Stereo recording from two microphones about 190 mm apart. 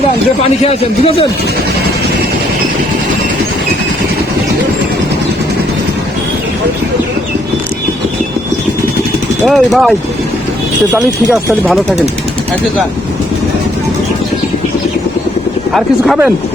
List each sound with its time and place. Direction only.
0.6 s a man's voice: 35° left (ahead or behind)
9.5 s speech: centre (ahead or behind)
11.6 s speech: centre (ahead or behind)